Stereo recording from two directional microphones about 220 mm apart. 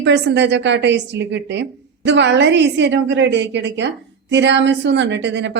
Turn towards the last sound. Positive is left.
turn(degrees=-55)  # may be behind; listen again after turning